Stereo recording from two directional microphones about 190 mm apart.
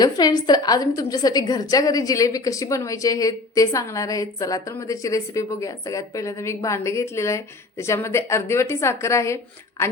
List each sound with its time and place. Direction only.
0.0 s a woman's voice: 20° left (ahead or behind)